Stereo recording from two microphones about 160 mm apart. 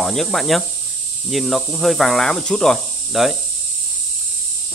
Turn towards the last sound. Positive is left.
turn(degrees=0)  # may be behind; listen again after turning